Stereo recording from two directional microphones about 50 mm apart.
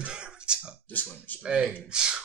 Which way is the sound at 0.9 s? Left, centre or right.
Left.